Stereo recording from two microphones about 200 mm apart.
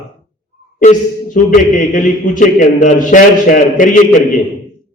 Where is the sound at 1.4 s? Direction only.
40° left (ahead or behind).